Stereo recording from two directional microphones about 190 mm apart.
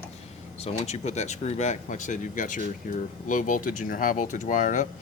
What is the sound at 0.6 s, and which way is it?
Speech, 35° left (ahead or behind).